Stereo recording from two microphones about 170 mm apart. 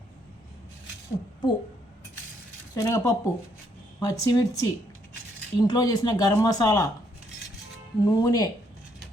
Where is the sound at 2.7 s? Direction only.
20° left (ahead or behind).